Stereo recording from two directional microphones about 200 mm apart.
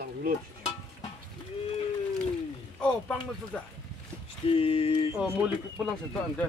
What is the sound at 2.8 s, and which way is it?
Speech, 5° left (ahead or behind).